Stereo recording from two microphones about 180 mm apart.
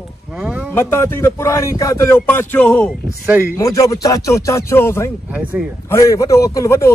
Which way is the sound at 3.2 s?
15° right (ahead or behind).